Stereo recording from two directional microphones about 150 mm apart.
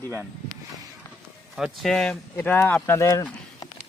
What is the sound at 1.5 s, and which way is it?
A man's voice, centre (ahead or behind).